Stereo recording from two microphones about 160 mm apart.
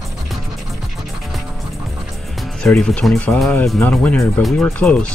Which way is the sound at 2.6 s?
5° left (ahead or behind).